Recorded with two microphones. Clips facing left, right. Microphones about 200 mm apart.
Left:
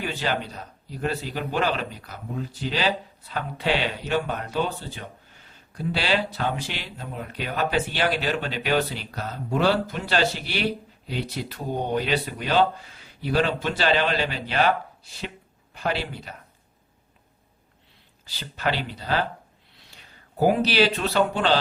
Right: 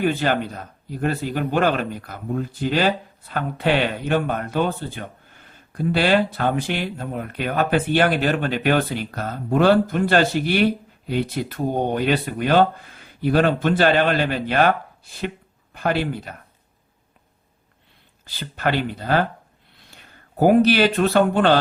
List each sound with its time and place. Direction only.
0.0 s speech: 50° right (ahead or behind)
18.3 s speech: 55° right (ahead or behind)